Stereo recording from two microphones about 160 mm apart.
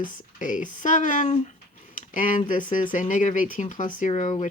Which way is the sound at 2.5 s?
55° left (ahead or behind).